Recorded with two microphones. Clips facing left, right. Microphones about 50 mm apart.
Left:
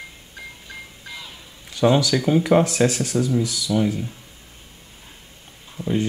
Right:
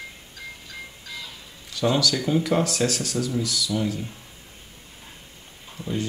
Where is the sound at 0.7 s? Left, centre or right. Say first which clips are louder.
Left 1 dB; left.